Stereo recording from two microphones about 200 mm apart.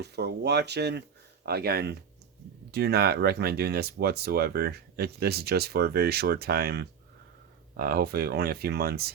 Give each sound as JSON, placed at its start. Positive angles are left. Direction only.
{"t": 0.0, "sound": "speech", "side_deg": -55}